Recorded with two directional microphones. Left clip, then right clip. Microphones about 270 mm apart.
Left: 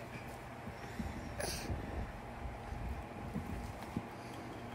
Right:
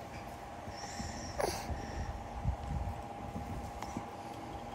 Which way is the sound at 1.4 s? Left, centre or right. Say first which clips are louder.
Right 6 dB; centre.